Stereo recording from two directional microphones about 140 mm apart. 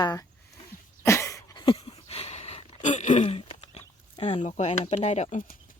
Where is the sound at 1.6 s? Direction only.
35° left (ahead or behind); by 3.2 s 60° left (ahead or behind).